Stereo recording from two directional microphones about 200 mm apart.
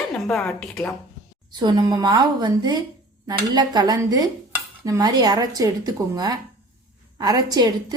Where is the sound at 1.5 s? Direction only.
20° right (ahead or behind).